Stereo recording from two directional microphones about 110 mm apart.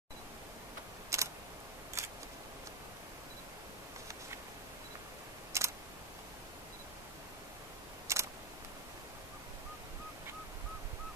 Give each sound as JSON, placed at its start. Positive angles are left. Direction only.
{"t": 1.1, "sound": "camera", "side_deg": -25}
{"t": 2.0, "sound": "a sound", "side_deg": -25}
{"t": 5.5, "sound": "camera", "side_deg": -25}
{"t": 8.1, "sound": "camera", "side_deg": -25}